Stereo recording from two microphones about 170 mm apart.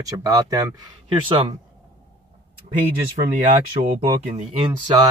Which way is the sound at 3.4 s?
50° right (ahead or behind).